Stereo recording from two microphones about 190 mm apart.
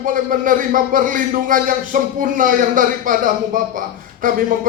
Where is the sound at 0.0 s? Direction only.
45° right (ahead or behind).